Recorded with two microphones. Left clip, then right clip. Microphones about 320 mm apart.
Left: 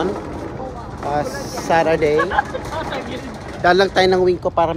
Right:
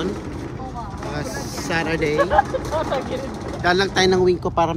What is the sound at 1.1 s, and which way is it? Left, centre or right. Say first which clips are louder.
Speech: left 9 dB; centre.